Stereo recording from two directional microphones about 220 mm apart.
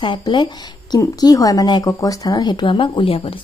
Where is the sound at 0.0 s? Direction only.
20° left (ahead or behind).